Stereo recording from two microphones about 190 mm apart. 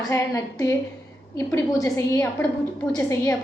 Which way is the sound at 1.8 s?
15° left (ahead or behind).